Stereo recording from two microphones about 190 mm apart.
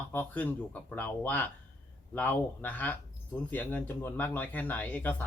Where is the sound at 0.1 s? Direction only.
10° left (ahead or behind).